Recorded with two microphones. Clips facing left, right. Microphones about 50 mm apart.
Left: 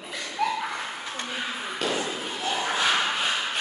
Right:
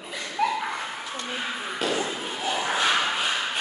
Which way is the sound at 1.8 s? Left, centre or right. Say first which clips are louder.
Right 1 dB; centre.